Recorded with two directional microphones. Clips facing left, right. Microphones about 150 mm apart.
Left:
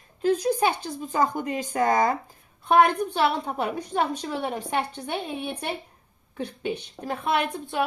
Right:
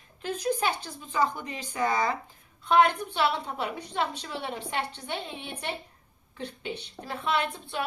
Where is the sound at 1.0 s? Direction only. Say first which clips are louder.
Left 3 dB; 45° left (ahead or behind).